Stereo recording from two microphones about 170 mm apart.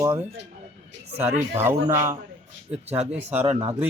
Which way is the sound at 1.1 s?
40° right (ahead or behind).